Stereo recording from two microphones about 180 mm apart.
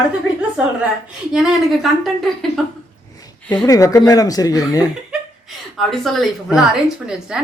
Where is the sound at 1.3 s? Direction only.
Centre (ahead or behind).